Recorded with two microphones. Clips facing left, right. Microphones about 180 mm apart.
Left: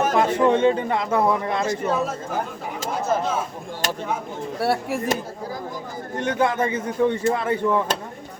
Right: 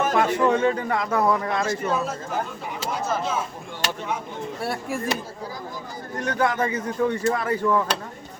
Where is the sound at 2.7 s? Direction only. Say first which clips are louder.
Left 3 dB; 50° left (ahead or behind).